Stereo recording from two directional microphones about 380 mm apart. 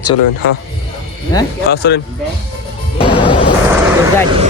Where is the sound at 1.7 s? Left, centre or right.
Left.